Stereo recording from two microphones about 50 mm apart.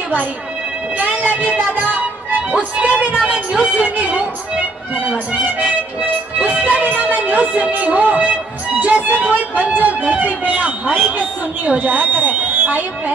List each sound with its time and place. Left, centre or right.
0.9 s speech: right
2.5 s speech: right
5.4 s speech: right
6.3 s music: right
8.7 s speech: right